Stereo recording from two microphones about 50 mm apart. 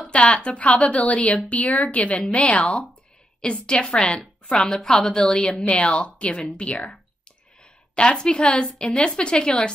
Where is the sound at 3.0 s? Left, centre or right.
Centre.